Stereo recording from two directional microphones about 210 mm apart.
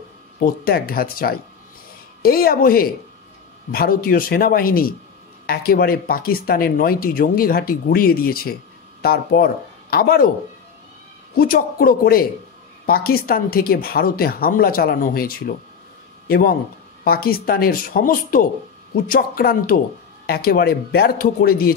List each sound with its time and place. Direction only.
0.7 s speech: 45° left (ahead or behind)
11.3 s a man's voice: 45° left (ahead or behind)